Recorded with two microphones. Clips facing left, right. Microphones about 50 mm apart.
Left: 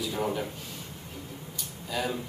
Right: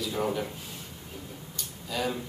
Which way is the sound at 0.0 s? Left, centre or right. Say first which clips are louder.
Right 1 dB; centre.